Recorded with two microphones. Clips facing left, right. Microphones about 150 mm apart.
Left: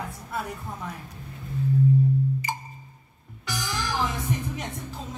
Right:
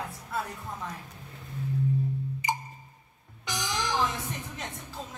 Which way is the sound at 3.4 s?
20° right (ahead or behind).